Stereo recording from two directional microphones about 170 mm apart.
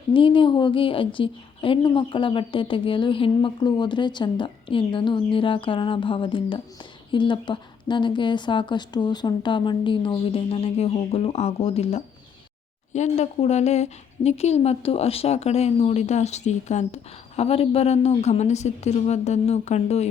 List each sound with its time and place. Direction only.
0.1 s a woman's voice: 30° left (ahead or behind)